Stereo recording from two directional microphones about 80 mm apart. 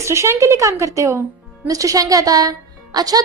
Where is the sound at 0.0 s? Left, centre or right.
Right.